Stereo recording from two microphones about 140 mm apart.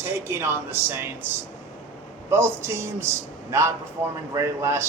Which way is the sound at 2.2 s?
20° right (ahead or behind).